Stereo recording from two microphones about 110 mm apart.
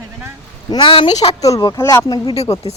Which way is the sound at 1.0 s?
90° left.